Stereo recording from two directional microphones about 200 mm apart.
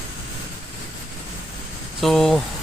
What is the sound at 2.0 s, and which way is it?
Speech, centre (ahead or behind).